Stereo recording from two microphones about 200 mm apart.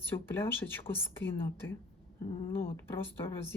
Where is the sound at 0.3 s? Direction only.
10° left (ahead or behind).